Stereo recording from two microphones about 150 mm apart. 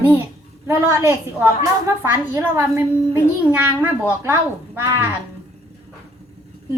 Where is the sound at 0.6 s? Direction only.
20° right (ahead or behind).